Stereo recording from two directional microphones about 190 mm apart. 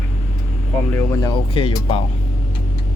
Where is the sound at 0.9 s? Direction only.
15° left (ahead or behind).